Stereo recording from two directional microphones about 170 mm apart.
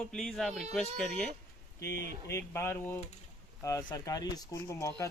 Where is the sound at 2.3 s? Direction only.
15° left (ahead or behind).